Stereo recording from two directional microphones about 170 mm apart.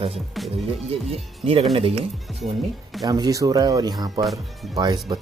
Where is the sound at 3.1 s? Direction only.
20° right (ahead or behind).